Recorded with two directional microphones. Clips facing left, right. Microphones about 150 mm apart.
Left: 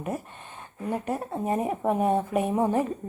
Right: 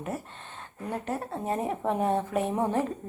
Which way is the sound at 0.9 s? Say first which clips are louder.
Left 3 dB; 10° left (ahead or behind).